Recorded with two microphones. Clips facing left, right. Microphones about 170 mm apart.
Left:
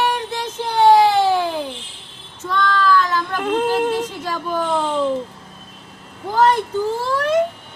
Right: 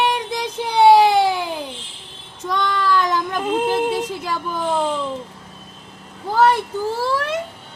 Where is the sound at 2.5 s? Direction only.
15° right (ahead or behind).